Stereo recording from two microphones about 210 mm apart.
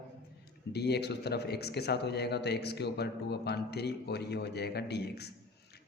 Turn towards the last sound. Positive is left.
turn(degrees=50)  # may be behind; listen again after turning